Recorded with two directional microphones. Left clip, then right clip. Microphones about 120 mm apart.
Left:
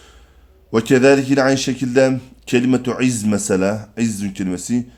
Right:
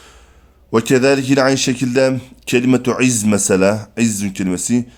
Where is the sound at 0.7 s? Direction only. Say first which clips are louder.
Even; 35° right (ahead or behind).